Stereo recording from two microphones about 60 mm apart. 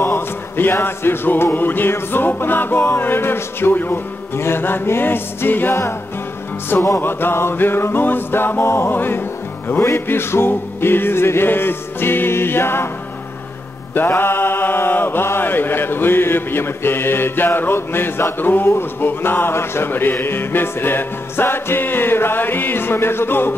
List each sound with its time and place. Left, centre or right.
0.0 s music: left
7.0 s music: left
13.9 s music: left